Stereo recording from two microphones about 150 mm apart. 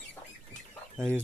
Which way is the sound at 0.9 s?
15° right (ahead or behind).